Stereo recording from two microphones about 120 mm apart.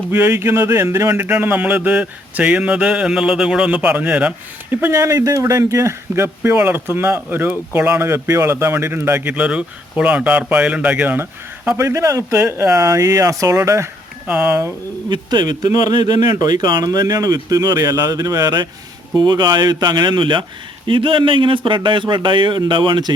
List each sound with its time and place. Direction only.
0.1 s speech: 20° right (ahead or behind)
14.3 s speech: 10° right (ahead or behind)
15.1 s speech: 40° right (ahead or behind)